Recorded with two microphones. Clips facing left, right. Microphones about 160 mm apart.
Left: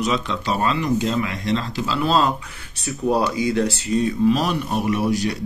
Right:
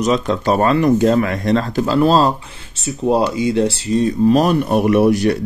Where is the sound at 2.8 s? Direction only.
25° right (ahead or behind).